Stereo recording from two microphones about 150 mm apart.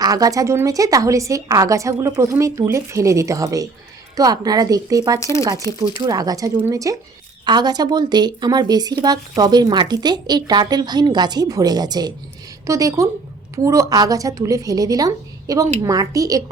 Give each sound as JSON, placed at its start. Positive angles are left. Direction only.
{"t": 0.0, "sound": "speech", "side_deg": -25}
{"t": 5.2, "sound": "speech", "side_deg": 20}
{"t": 6.1, "sound": "speech", "side_deg": -25}